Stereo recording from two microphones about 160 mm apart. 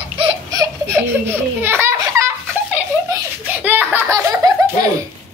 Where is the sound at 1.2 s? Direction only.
15° right (ahead or behind).